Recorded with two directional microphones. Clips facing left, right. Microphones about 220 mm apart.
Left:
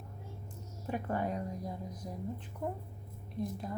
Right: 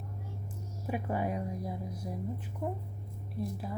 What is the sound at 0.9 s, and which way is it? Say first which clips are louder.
A woman's voice: right 1 dB; 10° right (ahead or behind).